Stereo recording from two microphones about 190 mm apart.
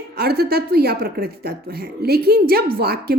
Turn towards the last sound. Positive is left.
turn(degrees=-55)  # may be behind; listen again after turning